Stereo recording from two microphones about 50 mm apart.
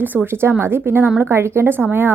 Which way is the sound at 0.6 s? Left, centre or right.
Right.